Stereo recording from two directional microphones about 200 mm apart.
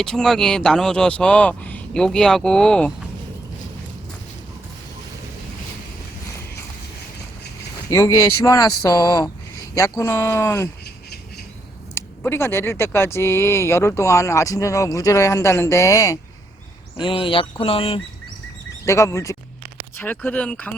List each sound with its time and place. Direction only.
0.0 s speech: 5° left (ahead or behind)
7.9 s speech: 15° left (ahead or behind)
11.9 s speech: 10° left (ahead or behind); by 18.0 s 30° left (ahead or behind)
18.9 s speech: 15° left (ahead or behind)